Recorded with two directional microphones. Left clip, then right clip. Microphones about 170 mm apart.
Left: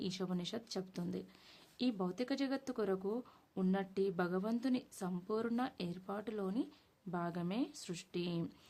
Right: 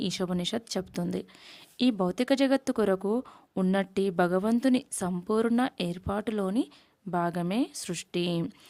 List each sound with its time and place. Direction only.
0.0 s a woman's voice: 45° right (ahead or behind)